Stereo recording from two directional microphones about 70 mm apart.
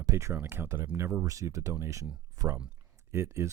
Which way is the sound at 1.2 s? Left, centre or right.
Right.